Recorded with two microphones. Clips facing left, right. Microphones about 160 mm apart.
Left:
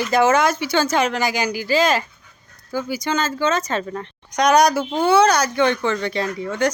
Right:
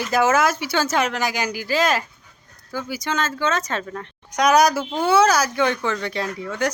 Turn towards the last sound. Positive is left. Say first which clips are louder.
# left 3 dB
turn(degrees=-5)  # may be behind; listen again after turning